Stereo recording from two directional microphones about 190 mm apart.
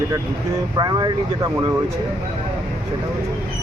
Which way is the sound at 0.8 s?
20° right (ahead or behind).